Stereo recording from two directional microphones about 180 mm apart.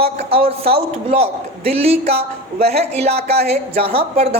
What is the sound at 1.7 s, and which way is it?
A woman's voice, 35° right (ahead or behind).